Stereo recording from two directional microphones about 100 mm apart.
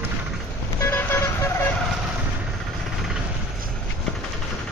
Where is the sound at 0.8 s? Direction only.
20° left (ahead or behind).